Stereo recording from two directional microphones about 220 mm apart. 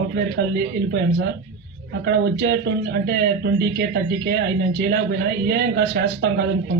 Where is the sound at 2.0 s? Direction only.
50° right (ahead or behind).